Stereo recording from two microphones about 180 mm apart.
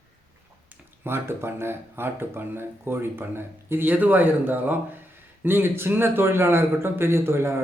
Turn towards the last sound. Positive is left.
turn(degrees=-15)  # may be behind; listen again after turning